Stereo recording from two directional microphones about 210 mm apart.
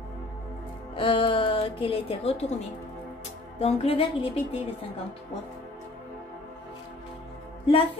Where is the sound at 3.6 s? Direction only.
30° left (ahead or behind).